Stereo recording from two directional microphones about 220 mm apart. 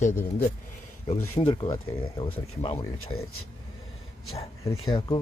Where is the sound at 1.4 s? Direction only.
20° left (ahead or behind).